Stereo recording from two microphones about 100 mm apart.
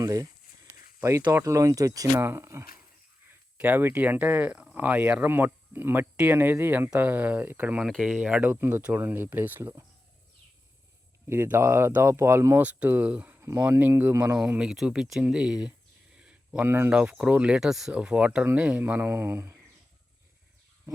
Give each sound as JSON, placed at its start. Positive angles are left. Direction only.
{"t": 0.0, "sound": "a sound", "side_deg": -40}
{"t": 1.3, "sound": "speech", "side_deg": -30}
{"t": 7.8, "sound": "speech", "side_deg": -5}
{"t": 11.3, "sound": "speech", "side_deg": -25}
{"t": 12.6, "sound": "speech", "side_deg": -15}
{"t": 14.3, "sound": "speech", "side_deg": -10}
{"t": 16.1, "sound": "a sound", "side_deg": -10}
{"t": 16.6, "sound": "speech", "side_deg": -20}